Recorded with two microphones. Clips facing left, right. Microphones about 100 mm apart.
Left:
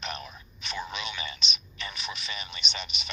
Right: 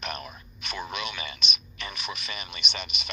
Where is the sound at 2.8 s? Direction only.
55° right (ahead or behind).